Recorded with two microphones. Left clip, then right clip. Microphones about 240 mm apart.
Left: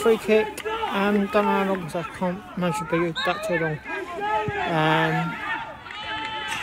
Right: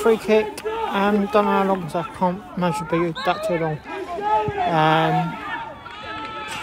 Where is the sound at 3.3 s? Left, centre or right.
Centre.